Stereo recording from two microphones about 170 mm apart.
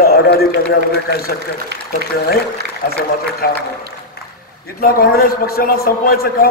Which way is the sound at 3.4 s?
60° left (ahead or behind).